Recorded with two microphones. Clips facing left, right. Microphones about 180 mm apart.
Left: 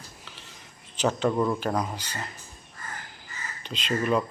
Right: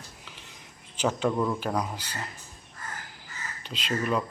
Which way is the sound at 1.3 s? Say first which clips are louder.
Left 2 dB; 5° left (ahead or behind).